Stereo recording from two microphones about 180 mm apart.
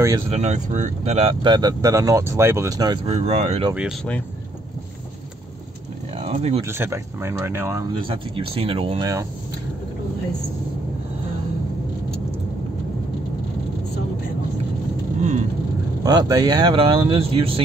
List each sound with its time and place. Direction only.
0.3 s speech: 40° right (ahead or behind); by 3.0 s 20° right (ahead or behind)
3.1 s speech: 40° right (ahead or behind)
6.1 s a sound: 35° right (ahead or behind)
6.6 s speech: 15° right (ahead or behind)
8.0 s speech: 30° right (ahead or behind)
15.1 s vehicle: 40° right (ahead or behind)
16.0 s speech: 20° right (ahead or behind)